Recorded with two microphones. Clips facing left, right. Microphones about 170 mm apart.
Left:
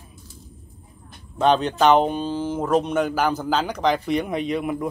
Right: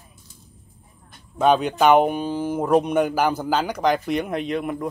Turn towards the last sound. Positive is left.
turn(degrees=0)  # may be behind; listen again after turning